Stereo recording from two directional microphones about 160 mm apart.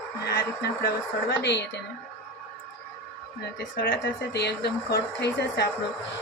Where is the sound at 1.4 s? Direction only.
90° left.